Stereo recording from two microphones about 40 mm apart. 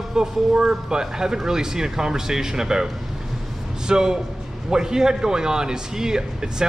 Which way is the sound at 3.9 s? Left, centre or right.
Centre.